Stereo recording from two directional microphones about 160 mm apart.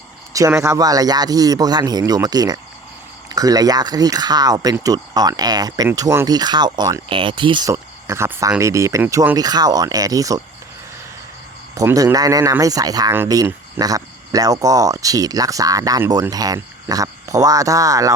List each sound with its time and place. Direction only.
0.6 s speech: 20° right (ahead or behind)
7.7 s speech: 15° right (ahead or behind)
11.7 s speech: 20° right (ahead or behind)